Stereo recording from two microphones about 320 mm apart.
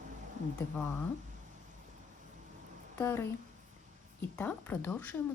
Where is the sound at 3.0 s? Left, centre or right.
Centre.